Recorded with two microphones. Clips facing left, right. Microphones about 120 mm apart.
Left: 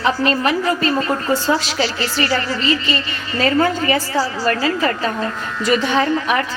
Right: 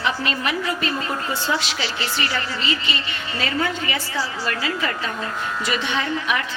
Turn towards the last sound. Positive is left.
turn(degrees=40)  # may be behind; listen again after turning